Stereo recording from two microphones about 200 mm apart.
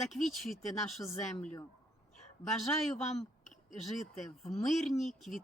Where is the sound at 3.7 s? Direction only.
Centre (ahead or behind).